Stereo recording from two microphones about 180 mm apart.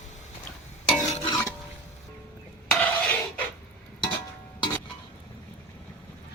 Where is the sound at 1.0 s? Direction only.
25° left (ahead or behind).